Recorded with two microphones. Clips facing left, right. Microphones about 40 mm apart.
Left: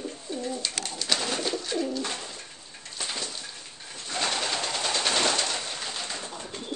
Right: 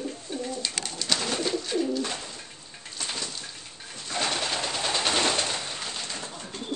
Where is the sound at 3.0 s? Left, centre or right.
Centre.